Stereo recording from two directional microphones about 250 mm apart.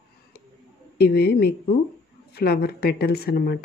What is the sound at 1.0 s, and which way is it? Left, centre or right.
Speech, left.